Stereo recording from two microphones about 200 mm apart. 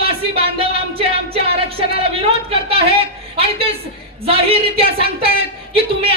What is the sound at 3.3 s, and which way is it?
A woman's voice, 30° right (ahead or behind).